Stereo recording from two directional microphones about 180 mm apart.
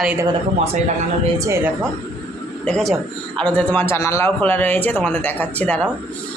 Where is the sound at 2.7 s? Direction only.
Centre (ahead or behind).